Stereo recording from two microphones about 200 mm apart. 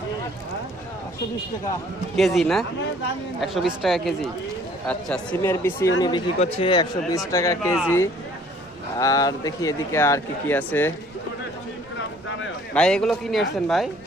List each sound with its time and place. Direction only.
2.1 s a man's voice: centre (ahead or behind)
12.7 s a man's voice: 5° left (ahead or behind)